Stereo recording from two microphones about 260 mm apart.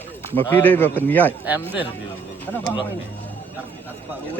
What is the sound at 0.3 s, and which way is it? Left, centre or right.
Speech, centre.